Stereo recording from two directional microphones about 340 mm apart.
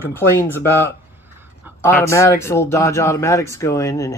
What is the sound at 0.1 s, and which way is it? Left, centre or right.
Speech, centre.